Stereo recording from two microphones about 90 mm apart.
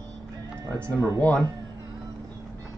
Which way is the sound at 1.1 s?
15° left (ahead or behind).